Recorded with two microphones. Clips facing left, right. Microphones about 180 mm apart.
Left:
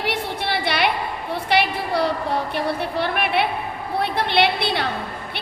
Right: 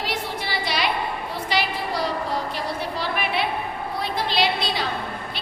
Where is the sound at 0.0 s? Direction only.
60° left (ahead or behind).